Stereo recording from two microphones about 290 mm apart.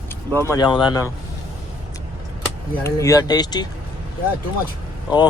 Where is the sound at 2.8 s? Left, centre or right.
Centre.